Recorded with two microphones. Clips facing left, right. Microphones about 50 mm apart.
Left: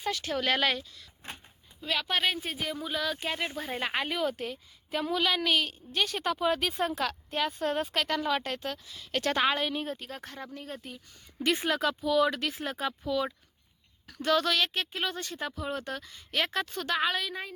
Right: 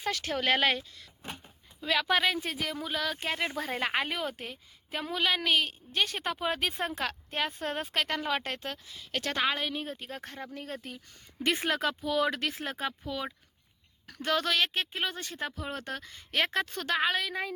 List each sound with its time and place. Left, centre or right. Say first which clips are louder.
0.0 s speech: even; right
0.3 s speech: right 1 dB; right
2.4 s speech: even; right
2.7 s speech: left 1 dB; right
4.4 s a woman's voice: left 5 dB; right
9.1 s a woman's voice: left 3 dB; centre
10.1 s a woman's voice: even; right
10.5 s speech: right 1 dB; right
11.6 s speech: left 1 dB; right
12.7 s a woman's voice: left 4 dB; right